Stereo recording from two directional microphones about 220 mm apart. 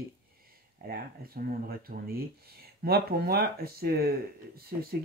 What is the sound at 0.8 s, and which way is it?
Speech, 45° right (ahead or behind).